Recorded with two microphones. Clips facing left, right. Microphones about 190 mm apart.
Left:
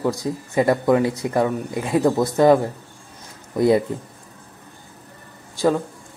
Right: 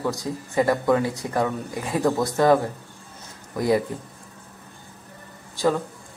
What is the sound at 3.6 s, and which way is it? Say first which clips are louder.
Speech: left 5 dB; 25° left (ahead or behind).